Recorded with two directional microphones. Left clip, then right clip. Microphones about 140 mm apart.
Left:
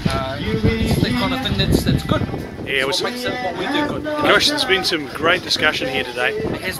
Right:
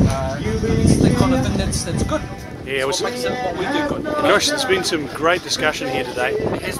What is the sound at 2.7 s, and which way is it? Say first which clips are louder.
Speech: left 1 dB; 10° right (ahead or behind).